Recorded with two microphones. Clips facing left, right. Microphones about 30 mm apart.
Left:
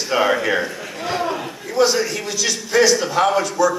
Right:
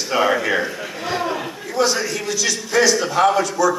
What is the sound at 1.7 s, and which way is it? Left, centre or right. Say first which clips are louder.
A man's voice: left 2 dB; centre.